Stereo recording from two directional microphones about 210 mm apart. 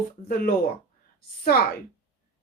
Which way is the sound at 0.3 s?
45° left (ahead or behind).